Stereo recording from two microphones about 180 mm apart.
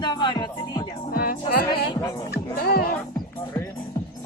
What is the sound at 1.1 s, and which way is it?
Music, 55° left (ahead or behind).